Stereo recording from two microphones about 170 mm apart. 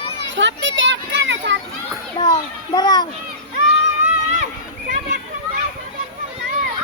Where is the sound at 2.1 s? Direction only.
25° left (ahead or behind).